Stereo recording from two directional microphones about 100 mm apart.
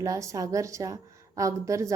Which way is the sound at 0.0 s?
35° right (ahead or behind).